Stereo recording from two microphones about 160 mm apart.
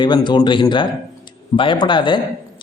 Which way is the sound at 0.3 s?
30° left (ahead or behind).